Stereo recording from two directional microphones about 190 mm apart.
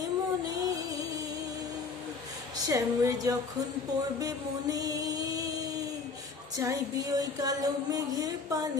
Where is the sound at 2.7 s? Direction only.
15° right (ahead or behind).